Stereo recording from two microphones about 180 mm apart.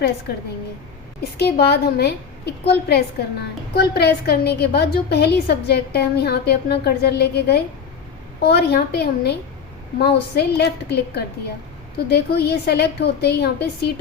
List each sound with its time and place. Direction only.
1.4 s a woman's voice: 65° left (ahead or behind)